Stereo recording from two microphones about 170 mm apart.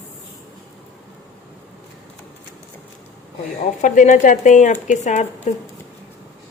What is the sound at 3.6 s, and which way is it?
Speech, 45° left (ahead or behind).